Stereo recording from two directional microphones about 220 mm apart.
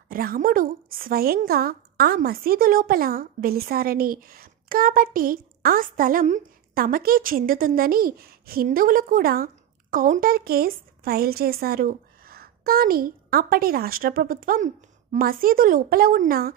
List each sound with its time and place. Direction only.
0.1 s speech: 40° right (ahead or behind)